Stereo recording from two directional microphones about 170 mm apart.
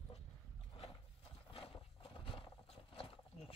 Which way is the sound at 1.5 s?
30° left (ahead or behind).